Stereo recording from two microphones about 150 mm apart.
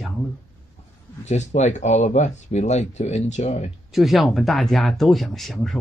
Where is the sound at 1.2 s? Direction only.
50° left (ahead or behind).